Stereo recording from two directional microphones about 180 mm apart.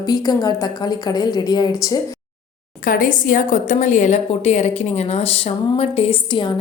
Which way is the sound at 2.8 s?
50° left (ahead or behind).